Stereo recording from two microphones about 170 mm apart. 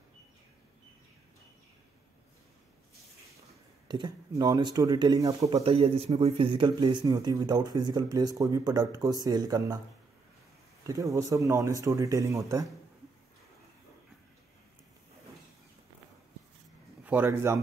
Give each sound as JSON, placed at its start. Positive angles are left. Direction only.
{"t": 3.8, "sound": "speech", "side_deg": -25}
{"t": 5.7, "sound": "speech", "side_deg": -35}
{"t": 10.9, "sound": "speech", "side_deg": -20}
{"t": 17.0, "sound": "a man's voice", "side_deg": -10}